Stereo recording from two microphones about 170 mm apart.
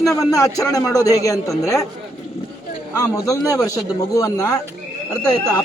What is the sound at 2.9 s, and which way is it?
A man's voice, 20° left (ahead or behind).